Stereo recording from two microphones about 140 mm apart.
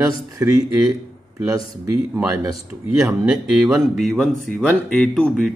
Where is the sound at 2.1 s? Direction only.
20° right (ahead or behind).